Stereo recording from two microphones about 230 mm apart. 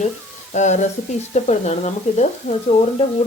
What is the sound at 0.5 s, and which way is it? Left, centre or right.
Speech, left.